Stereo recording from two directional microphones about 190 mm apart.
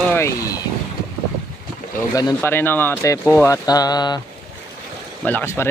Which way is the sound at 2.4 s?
10° left (ahead or behind).